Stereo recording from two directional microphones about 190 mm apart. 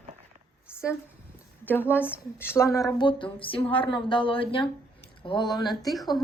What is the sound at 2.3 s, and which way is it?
Speech, 15° left (ahead or behind).